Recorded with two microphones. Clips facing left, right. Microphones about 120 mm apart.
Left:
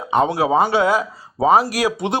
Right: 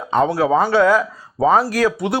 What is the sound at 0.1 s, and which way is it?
Speech, 20° left (ahead or behind).